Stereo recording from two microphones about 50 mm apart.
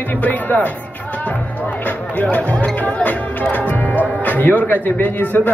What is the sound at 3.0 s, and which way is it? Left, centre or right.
Music, left.